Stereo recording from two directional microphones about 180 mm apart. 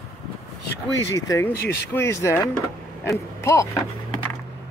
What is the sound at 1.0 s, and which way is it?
Speech, 20° left (ahead or behind).